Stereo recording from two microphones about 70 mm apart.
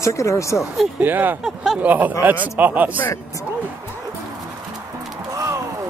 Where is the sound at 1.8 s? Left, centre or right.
Right.